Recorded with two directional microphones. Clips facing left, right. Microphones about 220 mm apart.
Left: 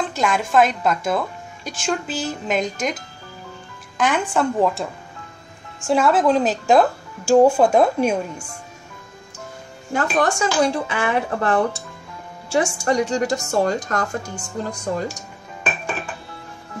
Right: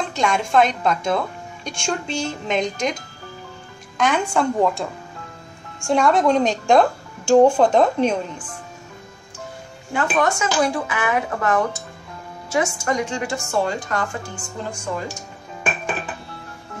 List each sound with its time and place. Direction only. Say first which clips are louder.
0.1 s speech: right 2 dB; 5° left (ahead or behind)
4.0 s speech: even; centre (ahead or behind)
9.9 s a woman's voice: left 1 dB; 35° left (ahead or behind)